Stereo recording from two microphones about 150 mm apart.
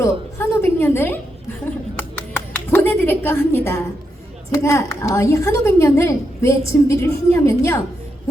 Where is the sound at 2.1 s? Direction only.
10° left (ahead or behind).